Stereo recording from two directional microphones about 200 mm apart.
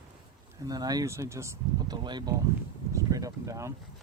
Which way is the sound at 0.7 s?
20° right (ahead or behind).